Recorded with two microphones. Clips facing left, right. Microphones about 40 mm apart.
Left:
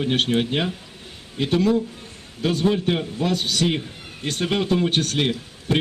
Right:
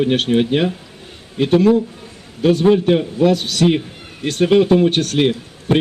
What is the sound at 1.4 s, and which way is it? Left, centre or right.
A man's voice, centre.